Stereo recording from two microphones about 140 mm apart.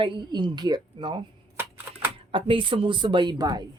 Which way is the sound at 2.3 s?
35° right (ahead or behind).